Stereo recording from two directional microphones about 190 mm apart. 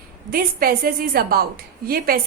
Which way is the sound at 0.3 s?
50° right (ahead or behind).